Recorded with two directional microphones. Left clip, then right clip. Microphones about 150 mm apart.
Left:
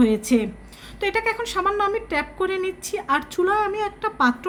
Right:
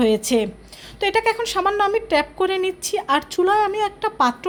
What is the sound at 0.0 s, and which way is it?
Speech, 25° right (ahead or behind).